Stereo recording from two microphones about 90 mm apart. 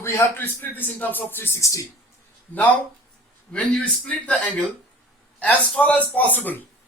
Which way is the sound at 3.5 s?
15° left (ahead or behind).